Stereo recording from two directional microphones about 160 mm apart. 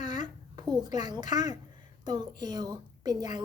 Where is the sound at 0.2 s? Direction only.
25° right (ahead or behind).